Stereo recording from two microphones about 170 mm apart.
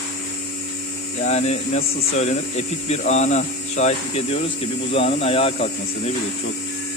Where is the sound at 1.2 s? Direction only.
40° left (ahead or behind).